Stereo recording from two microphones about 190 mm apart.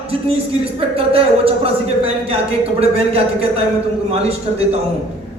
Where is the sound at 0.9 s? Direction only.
30° right (ahead or behind).